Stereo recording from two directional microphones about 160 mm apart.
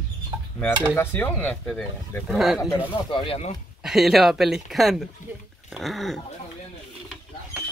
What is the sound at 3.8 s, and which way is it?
Speech, centre (ahead or behind).